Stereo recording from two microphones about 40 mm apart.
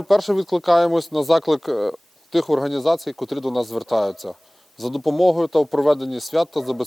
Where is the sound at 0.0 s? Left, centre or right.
Centre.